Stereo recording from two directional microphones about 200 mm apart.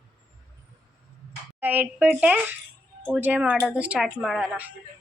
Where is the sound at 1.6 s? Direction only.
10° right (ahead or behind).